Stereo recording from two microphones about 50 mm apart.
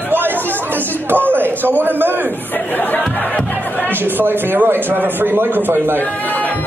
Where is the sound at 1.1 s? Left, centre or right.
Right.